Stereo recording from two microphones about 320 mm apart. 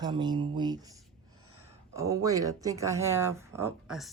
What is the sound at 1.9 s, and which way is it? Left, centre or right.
Speech, centre.